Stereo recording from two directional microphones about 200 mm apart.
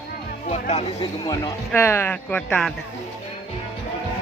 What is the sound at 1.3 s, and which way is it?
Speech, 10° left (ahead or behind).